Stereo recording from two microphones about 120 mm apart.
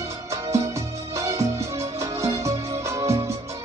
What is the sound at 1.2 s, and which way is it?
Music, 25° right (ahead or behind).